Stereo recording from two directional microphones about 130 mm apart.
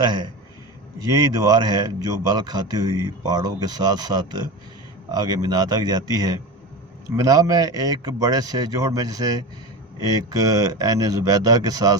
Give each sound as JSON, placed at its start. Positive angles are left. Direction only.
{"t": 0.0, "sound": "speech", "side_deg": -35}